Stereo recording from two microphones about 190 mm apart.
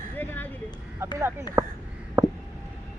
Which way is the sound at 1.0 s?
15° right (ahead or behind).